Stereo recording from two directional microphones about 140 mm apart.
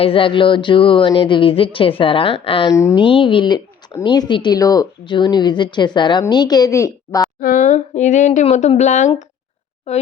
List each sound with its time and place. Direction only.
0.0 s a woman's voice: 40° left (ahead or behind)
2.7 s a woman's voice: 20° left (ahead or behind)
3.0 s a woman's voice: 35° left (ahead or behind)
7.4 s a woman's voice: 75° left (ahead or behind); by 10.0 s 55° left (ahead or behind)